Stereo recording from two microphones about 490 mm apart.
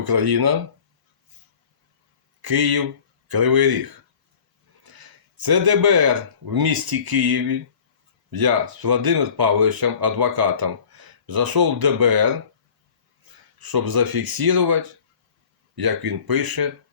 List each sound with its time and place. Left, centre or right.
0.0 s speech: right
2.4 s speech: right
4.9 s a sound: right
5.4 s speech: right
13.6 s speech: right